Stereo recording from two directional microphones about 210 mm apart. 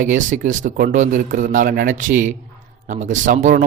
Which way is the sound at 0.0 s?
40° right (ahead or behind).